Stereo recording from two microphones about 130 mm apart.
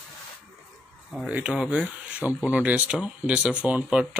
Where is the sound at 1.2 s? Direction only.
10° right (ahead or behind).